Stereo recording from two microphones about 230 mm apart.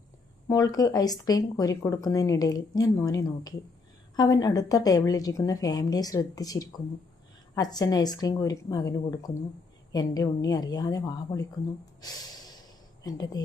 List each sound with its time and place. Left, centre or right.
0.4 s speech: centre
12.0 s snort: centre
13.0 s speech: centre